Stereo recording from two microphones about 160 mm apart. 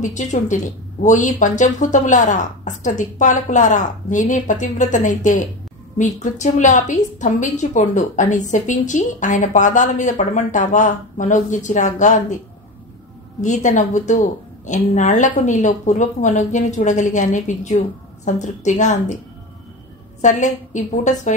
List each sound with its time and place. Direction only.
0.0 s a woman's voice: 50° left (ahead or behind)
13.4 s a woman's voice: 50° left (ahead or behind)
20.2 s a woman's voice: 50° left (ahead or behind)